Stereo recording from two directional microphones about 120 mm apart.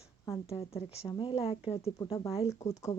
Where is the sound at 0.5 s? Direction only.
55° left (ahead or behind).